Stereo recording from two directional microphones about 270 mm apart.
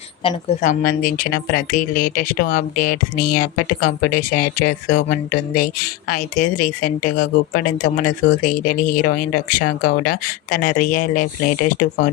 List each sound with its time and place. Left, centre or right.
0.2 s speech: left